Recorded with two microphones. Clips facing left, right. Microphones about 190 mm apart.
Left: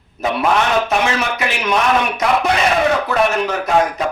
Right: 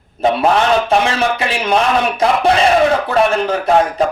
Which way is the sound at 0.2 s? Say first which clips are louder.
Right 6 dB; 30° right (ahead or behind).